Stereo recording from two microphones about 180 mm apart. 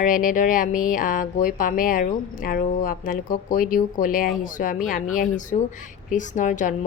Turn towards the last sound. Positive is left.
turn(degrees=45)  # may be behind; listen again after turning